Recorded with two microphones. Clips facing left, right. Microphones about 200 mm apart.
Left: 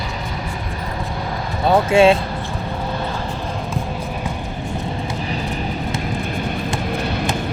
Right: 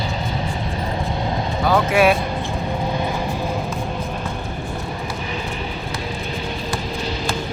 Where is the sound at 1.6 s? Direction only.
25° left (ahead or behind).